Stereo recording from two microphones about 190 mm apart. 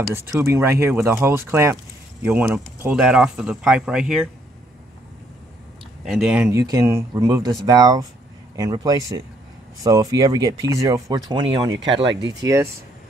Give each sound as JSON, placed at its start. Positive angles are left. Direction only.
{"t": 0.1, "sound": "speech", "side_deg": -15}
{"t": 6.0, "sound": "speech", "side_deg": 0}
{"t": 6.6, "sound": "speech", "side_deg": -20}